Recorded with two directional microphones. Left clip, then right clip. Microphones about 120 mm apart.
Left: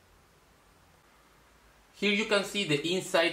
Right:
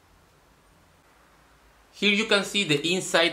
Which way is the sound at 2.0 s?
30° right (ahead or behind).